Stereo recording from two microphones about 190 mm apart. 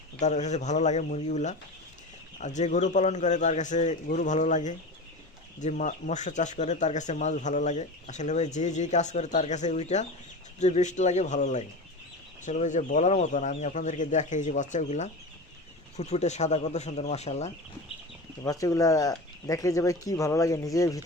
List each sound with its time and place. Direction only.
0.2 s speech: 35° left (ahead or behind)
18.4 s speech: 15° left (ahead or behind)